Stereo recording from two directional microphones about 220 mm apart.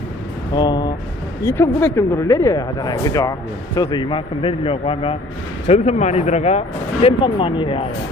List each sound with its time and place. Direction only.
0.5 s speech: 20° left (ahead or behind)